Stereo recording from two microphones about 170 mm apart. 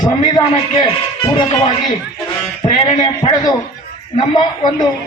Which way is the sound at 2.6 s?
25° left (ahead or behind).